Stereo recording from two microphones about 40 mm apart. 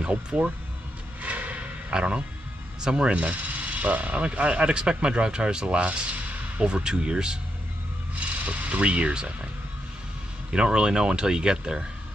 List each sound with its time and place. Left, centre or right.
0.0 s speech: right
1.2 s a sound: right
1.9 s speech: right
8.5 s speech: right
10.5 s speech: right